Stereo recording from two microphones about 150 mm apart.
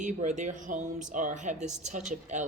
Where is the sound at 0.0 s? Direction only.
55° right (ahead or behind).